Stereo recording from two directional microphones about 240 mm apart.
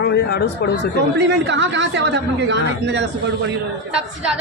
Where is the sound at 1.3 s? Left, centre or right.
Right.